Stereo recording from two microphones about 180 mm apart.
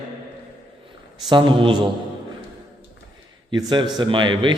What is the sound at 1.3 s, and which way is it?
Speech, 25° right (ahead or behind).